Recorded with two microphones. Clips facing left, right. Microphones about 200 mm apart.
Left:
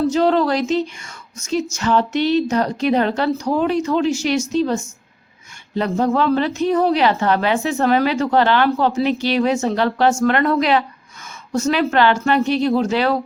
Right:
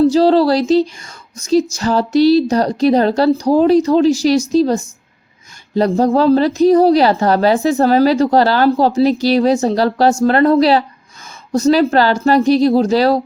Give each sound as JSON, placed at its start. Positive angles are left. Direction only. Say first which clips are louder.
{"t": 0.0, "sound": "a woman's voice", "louder": "right 6 dB", "side_deg": -35}